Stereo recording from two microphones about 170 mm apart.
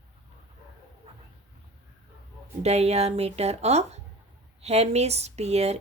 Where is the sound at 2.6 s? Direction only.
40° right (ahead or behind).